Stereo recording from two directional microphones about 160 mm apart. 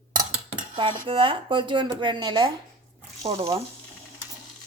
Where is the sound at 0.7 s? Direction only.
30° right (ahead or behind).